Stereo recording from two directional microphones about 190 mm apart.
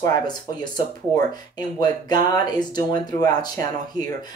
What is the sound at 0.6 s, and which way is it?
Speech, 20° left (ahead or behind).